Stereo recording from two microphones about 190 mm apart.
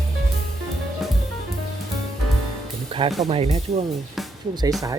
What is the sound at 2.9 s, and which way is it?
Speech, 30° right (ahead or behind).